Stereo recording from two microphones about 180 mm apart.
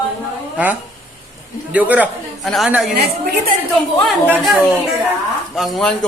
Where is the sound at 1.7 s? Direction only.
10° right (ahead or behind).